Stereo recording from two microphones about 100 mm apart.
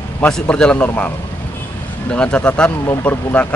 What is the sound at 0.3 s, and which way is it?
Speech, 10° left (ahead or behind).